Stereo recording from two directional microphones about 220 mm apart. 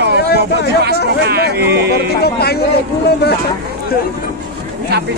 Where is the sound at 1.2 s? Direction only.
45° right (ahead or behind).